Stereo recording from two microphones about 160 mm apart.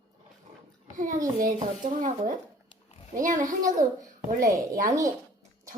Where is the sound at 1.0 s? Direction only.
55° right (ahead or behind).